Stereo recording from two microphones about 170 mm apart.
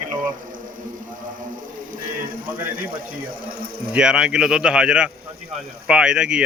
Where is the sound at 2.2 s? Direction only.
55° right (ahead or behind).